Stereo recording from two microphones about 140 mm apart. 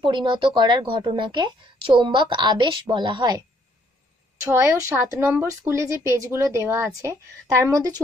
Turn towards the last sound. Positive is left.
turn(degrees=-25)  # may be behind; listen again after turning